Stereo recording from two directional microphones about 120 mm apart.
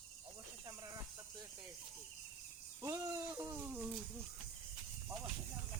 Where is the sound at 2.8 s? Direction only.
30° right (ahead or behind).